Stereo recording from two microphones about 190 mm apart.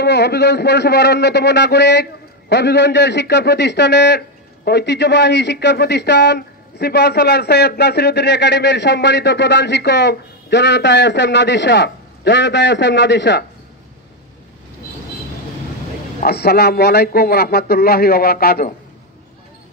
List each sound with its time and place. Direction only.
0.0 s a man's voice: 60° left (ahead or behind)
16.2 s a man's voice: 55° left (ahead or behind)